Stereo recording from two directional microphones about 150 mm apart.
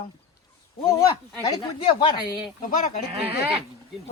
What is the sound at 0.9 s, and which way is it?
Speech, 25° left (ahead or behind).